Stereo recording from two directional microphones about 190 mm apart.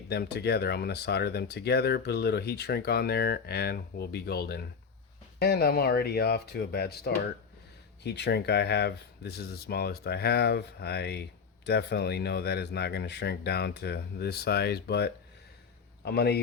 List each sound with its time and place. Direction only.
0.1 s speech: 60° left (ahead or behind)